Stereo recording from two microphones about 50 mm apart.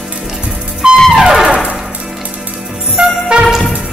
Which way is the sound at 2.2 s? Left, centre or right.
Right.